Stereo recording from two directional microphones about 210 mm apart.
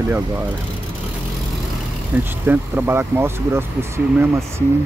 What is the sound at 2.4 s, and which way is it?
Speech, 10° right (ahead or behind).